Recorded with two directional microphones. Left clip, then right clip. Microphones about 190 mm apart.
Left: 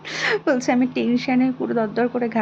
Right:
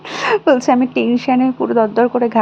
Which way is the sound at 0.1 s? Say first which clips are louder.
Right 7 dB; 15° right (ahead or behind).